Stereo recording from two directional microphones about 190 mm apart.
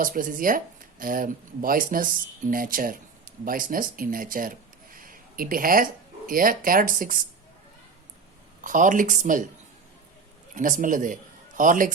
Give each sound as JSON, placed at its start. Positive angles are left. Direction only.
{"t": 0.0, "sound": "speech", "side_deg": -45}
{"t": 8.6, "sound": "speech", "side_deg": -45}
{"t": 10.5, "sound": "a man's voice", "side_deg": -45}